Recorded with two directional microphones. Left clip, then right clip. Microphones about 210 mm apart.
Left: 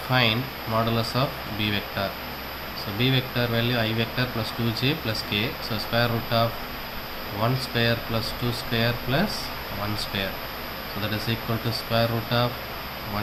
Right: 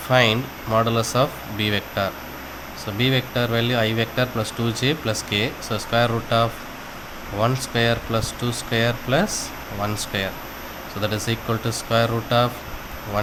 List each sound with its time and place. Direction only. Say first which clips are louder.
0.1 s speech: right 5 dB; 50° right (ahead or behind)
11.1 s speech: right 3 dB; 50° right (ahead or behind)